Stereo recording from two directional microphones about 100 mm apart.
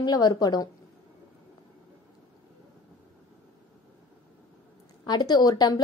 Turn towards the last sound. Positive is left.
turn(degrees=40)  # may be behind; listen again after turning